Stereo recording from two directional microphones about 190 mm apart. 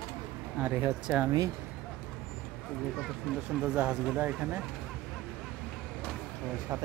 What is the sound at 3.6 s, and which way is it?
Speech, 5° right (ahead or behind).